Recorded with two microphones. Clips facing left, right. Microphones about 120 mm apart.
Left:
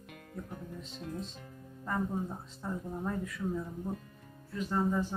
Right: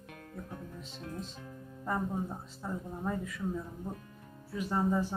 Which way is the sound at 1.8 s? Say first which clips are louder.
Even; 15° right (ahead or behind).